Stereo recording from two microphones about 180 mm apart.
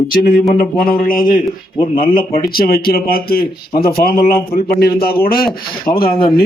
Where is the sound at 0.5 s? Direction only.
55° left (ahead or behind).